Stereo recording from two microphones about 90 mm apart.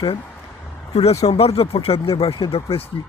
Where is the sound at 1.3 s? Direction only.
90° left.